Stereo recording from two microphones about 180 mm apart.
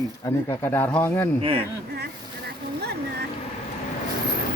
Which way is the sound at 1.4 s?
30° right (ahead or behind).